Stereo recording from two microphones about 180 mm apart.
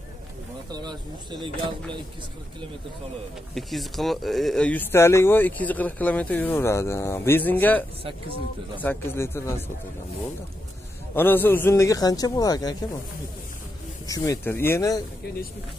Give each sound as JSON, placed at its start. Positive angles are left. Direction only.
{"t": 0.7, "sound": "speech", "side_deg": -25}
{"t": 3.5, "sound": "speech", "side_deg": 0}
{"t": 11.1, "sound": "speech", "side_deg": 10}
{"t": 14.0, "sound": "speech", "side_deg": 20}